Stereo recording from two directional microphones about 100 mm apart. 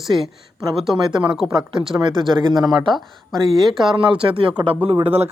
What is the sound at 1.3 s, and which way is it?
Speech, 5° right (ahead or behind).